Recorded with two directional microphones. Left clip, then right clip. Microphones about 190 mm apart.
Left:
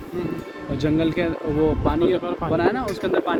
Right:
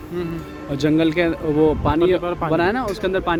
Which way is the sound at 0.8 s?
50° right (ahead or behind).